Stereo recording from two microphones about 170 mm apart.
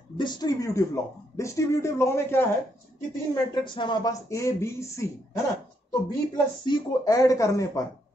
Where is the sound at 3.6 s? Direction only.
30° left (ahead or behind).